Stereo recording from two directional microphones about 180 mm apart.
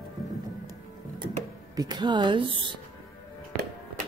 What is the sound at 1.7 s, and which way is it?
Speech, 20° right (ahead or behind).